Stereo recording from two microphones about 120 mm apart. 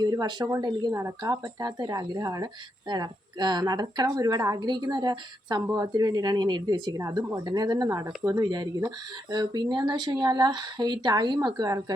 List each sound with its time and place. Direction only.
0.0 s speech: 30° right (ahead or behind)
0.9 s speech: 25° right (ahead or behind)
5.6 s speech: 25° right (ahead or behind)